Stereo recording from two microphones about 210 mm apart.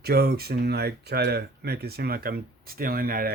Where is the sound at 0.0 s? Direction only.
50° right (ahead or behind).